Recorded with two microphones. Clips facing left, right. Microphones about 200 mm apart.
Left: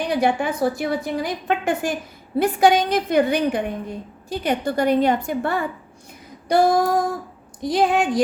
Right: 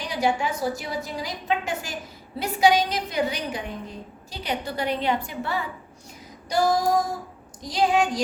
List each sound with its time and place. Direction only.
0.0 s a woman's voice: 55° left (ahead or behind)